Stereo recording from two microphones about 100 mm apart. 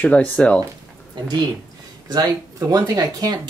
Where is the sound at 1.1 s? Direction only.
45° right (ahead or behind).